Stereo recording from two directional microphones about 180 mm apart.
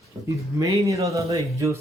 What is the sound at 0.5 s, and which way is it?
Speech, 20° right (ahead or behind).